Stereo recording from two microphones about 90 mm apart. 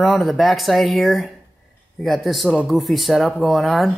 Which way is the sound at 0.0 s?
Centre (ahead or behind).